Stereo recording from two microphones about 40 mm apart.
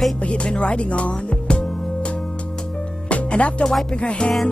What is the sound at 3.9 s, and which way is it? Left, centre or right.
Speech, left.